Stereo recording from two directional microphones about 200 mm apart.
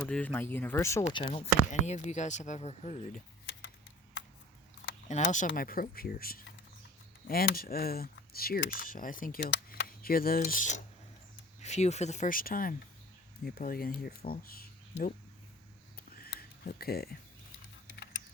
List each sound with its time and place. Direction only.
0.0 s speech: 5° left (ahead or behind)
1.0 s speech: 30° left (ahead or behind)
5.0 s speech: 35° left (ahead or behind)
9.5 s speech: 55° left (ahead or behind)
16.2 s a sound: 50° left (ahead or behind)
17.8 s typing: 60° left (ahead or behind)